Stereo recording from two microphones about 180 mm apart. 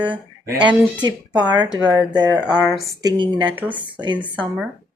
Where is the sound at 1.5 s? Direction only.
25° right (ahead or behind).